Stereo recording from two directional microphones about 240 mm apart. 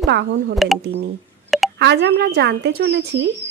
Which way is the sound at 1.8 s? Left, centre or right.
Right.